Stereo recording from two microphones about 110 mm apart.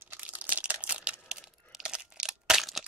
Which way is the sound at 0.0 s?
15° right (ahead or behind).